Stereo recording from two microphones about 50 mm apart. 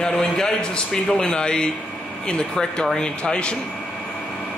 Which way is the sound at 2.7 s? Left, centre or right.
Centre.